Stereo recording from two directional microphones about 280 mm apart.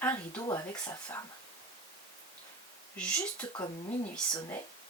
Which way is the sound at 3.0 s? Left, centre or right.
Centre.